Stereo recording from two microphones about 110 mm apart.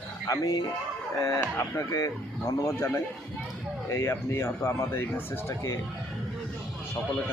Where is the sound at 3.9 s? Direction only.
25° left (ahead or behind).